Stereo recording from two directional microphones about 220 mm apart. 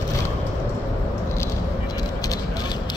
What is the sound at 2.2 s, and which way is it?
Vehicle, 15° left (ahead or behind).